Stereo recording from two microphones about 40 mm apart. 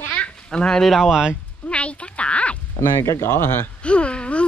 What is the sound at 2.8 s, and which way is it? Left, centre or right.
Speech, left.